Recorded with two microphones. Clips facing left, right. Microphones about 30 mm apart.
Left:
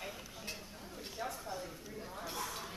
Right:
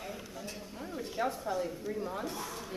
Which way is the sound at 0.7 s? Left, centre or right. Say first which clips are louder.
Right 9 dB; right.